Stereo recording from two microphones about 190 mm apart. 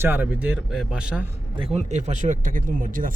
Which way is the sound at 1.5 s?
30° right (ahead or behind).